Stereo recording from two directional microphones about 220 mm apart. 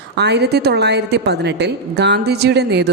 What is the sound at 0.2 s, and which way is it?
A woman's voice, 50° right (ahead or behind).